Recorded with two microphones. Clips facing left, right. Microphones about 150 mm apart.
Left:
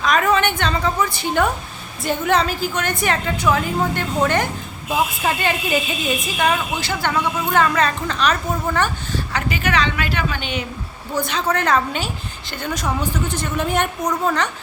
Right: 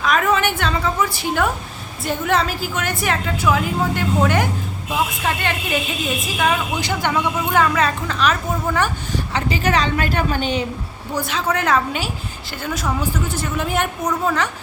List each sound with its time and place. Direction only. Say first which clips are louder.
0.0 s a woman's voice: left 1 dB; 5° right (ahead or behind)
4.9 s a woman's voice: left 2 dB; 5° left (ahead or behind)
6.7 s a woman's voice: right 1 dB; 15° right (ahead or behind)
9.3 s a woman's voice: right 2 dB; 35° right (ahead or behind)
11.1 s a woman's voice: left 1 dB; 5° right (ahead or behind)